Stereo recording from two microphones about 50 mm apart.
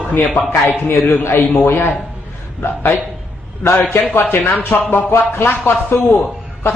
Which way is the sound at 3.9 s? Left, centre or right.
Left.